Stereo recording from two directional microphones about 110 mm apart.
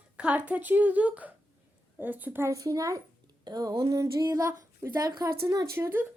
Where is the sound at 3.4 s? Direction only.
35° right (ahead or behind).